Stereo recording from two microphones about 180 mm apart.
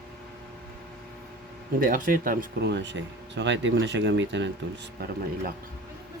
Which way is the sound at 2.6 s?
75° right (ahead or behind).